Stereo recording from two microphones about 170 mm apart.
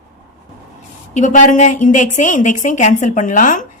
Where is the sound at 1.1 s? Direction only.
45° left (ahead or behind).